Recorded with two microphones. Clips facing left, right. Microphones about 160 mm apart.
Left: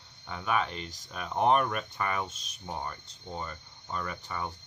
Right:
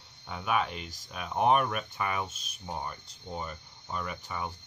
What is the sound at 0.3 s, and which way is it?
Speech, 5° right (ahead or behind).